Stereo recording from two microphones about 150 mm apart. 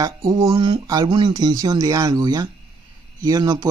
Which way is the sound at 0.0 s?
25° right (ahead or behind).